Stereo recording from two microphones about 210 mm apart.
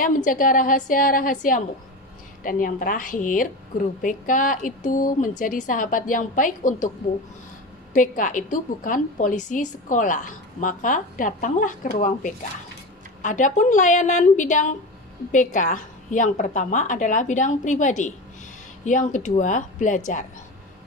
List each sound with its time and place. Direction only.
0.0 s a woman's voice: 40° left (ahead or behind)
7.9 s a woman's voice: 40° left (ahead or behind)